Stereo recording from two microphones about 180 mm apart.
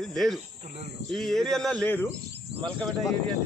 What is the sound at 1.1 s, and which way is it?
Speech, centre (ahead or behind).